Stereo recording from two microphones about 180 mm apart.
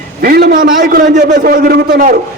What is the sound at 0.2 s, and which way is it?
A man's voice, 60° right (ahead or behind).